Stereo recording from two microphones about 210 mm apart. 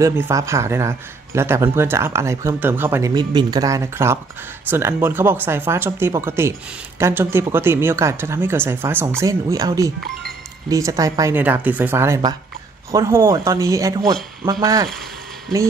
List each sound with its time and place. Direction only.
0.0 s speech: 15° right (ahead or behind)